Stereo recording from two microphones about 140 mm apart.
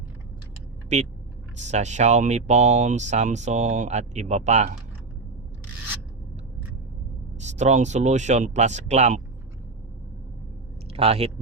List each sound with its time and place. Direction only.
0.9 s speech: 55° right (ahead or behind)
7.3 s speech: 55° right (ahead or behind)
10.9 s speech: 45° right (ahead or behind)